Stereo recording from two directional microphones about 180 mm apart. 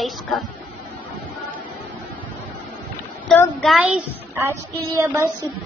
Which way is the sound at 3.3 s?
5° left (ahead or behind).